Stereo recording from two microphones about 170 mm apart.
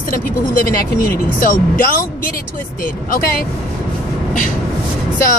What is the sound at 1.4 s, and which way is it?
Speech, 50° left (ahead or behind).